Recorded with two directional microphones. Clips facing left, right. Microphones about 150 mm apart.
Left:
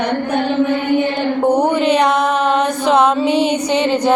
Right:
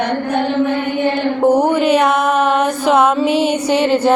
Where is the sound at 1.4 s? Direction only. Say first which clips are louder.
Right 2 dB; 5° right (ahead or behind).